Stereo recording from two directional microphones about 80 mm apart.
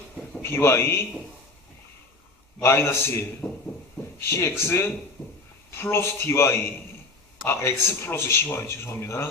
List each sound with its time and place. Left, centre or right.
0.4 s speech: left
2.6 s speech: left
5.2 s a sound: left
5.7 s speech: left